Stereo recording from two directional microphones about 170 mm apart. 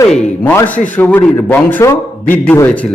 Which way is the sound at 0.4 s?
10° left (ahead or behind).